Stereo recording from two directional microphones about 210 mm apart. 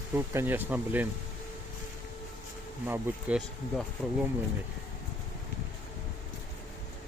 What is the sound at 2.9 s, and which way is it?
Speech, 5° right (ahead or behind).